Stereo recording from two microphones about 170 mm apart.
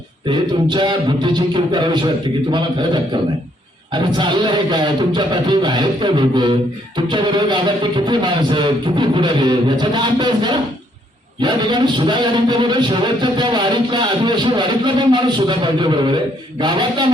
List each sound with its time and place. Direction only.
0.3 s speech: 25° right (ahead or behind)